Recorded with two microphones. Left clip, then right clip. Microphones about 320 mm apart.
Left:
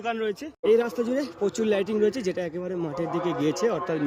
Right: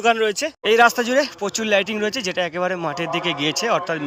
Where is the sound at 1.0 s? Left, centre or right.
Centre.